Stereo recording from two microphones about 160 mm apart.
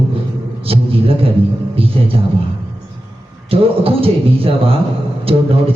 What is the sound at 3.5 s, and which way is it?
A man's voice, 35° right (ahead or behind).